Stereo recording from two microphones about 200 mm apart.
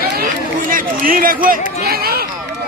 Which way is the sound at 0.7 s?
45° right (ahead or behind).